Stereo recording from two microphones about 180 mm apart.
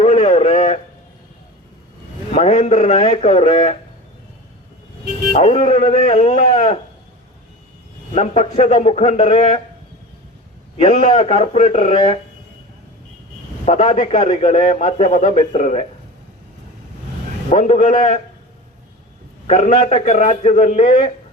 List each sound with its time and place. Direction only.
0.0 s a sound: 35° left (ahead or behind)
2.3 s a man's voice: 35° left (ahead or behind)
5.3 s a man's voice: 40° left (ahead or behind)
8.1 s a man's voice: 40° left (ahead or behind)
10.8 s a man's voice: 45° left (ahead or behind)
11.1 s a man's voice: 35° left (ahead or behind)
11.9 s a sound: 30° left (ahead or behind)
13.7 s a man's voice: 35° left (ahead or behind)
14.3 s a man's voice: 40° left (ahead or behind)
17.5 s a man's voice: 45° left (ahead or behind)
19.5 s a man's voice: 40° left (ahead or behind)